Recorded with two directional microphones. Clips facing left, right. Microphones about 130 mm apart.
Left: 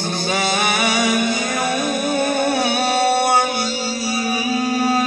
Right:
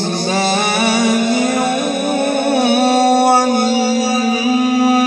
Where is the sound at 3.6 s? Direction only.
65° right (ahead or behind); by 5.0 s 90° right.